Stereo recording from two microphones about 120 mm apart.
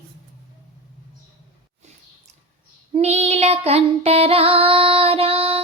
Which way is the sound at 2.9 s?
60° right (ahead or behind).